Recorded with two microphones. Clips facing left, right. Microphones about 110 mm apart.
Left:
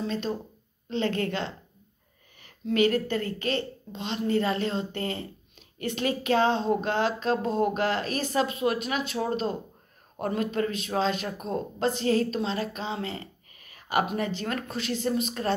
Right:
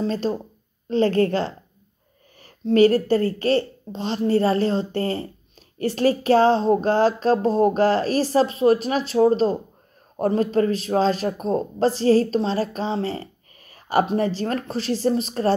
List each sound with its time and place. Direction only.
0.0 s a man's voice: 35° right (ahead or behind)